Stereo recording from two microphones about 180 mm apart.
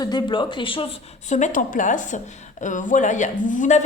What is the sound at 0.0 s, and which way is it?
A woman's voice, 25° left (ahead or behind).